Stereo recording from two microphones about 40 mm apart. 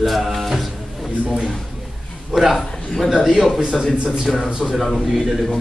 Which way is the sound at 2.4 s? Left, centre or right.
Centre.